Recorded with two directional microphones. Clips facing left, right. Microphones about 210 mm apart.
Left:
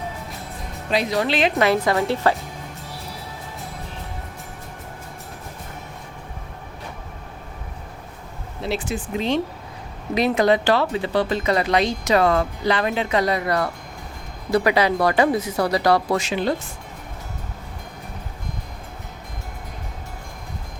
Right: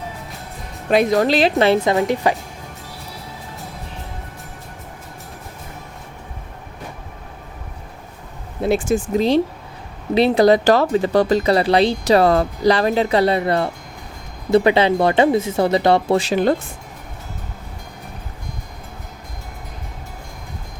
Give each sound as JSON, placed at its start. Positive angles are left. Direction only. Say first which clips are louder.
{"t": 0.9, "sound": "speech", "louder": "right 6 dB", "side_deg": -50}
{"t": 8.6, "sound": "speech", "louder": "right 8 dB", "side_deg": -50}
{"t": 16.3, "sound": "speech", "louder": "right 7 dB", "side_deg": -50}